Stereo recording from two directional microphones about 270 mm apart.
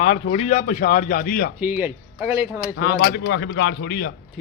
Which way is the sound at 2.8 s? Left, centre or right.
Left.